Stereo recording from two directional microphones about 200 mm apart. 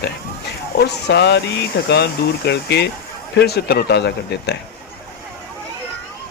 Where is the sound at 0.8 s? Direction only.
55° left (ahead or behind).